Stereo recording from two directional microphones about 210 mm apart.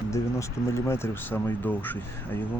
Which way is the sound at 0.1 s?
15° left (ahead or behind).